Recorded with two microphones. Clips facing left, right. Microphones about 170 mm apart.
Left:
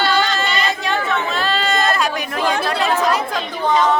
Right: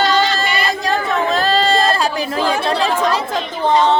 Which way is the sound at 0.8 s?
35° right (ahead or behind).